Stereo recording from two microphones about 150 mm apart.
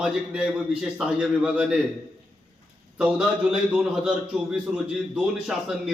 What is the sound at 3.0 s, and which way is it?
A man's voice, 5° right (ahead or behind).